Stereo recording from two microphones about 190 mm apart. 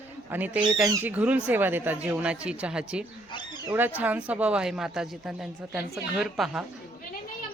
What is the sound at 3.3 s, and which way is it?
Wild animals, 25° left (ahead or behind).